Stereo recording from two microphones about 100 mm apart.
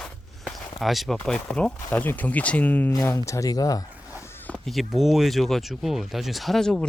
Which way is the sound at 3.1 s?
30° left (ahead or behind).